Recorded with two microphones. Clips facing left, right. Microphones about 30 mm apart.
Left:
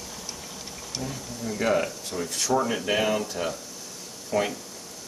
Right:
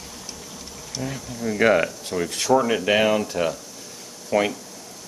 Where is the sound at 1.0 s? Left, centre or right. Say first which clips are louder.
Right 5 dB; centre.